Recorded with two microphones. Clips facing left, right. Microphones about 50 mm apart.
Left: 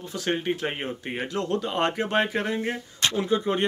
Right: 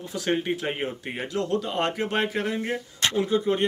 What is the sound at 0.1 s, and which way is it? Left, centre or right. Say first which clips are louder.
Speech: right 1 dB; centre.